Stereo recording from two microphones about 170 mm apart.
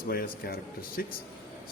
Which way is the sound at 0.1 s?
65° left (ahead or behind).